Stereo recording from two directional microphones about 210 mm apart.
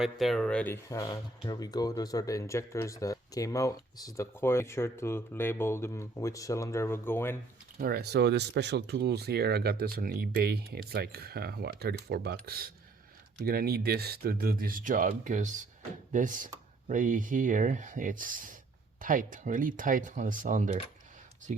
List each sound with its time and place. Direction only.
0.0 s speech: centre (ahead or behind)
7.8 s speech: 50° right (ahead or behind)